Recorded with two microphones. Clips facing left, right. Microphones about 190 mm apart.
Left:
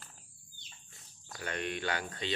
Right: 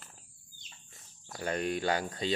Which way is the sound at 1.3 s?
40° right (ahead or behind).